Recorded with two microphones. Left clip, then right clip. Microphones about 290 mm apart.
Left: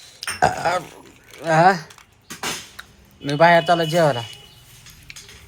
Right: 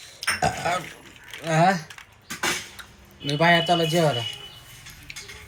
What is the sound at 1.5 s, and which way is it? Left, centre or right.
Speech, centre.